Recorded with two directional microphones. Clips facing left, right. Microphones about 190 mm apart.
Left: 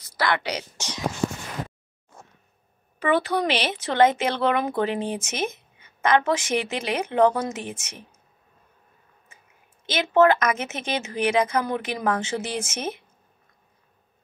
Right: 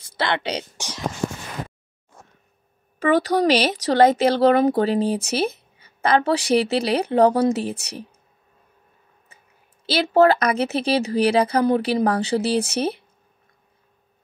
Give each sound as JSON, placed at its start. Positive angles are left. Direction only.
{"t": 0.0, "sound": "speech", "side_deg": -25}
{"t": 3.0, "sound": "speech", "side_deg": -40}
{"t": 9.8, "sound": "speech", "side_deg": -35}